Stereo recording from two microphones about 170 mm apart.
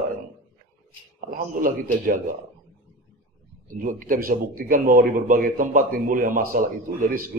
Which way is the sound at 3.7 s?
50° right (ahead or behind).